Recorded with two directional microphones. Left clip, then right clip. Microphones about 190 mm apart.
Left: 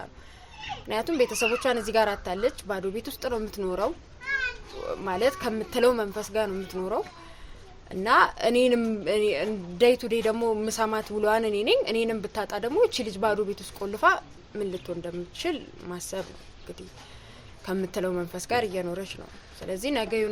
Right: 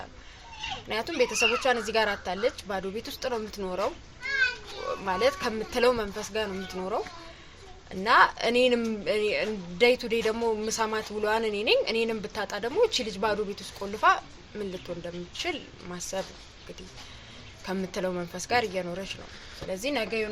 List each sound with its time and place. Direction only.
0.9 s speech: 65° left (ahead or behind)
5.0 s speech: 60° left (ahead or behind)
8.0 s speech: 60° left (ahead or behind)
17.7 s speech: 60° left (ahead or behind)